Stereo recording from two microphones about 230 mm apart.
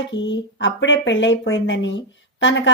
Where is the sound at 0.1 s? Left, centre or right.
Left.